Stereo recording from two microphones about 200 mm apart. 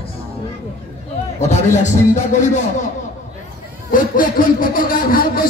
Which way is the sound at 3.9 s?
45° left (ahead or behind).